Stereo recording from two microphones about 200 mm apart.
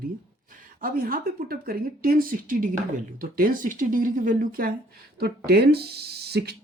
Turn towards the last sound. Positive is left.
turn(degrees=-55)  # may be behind; listen again after turning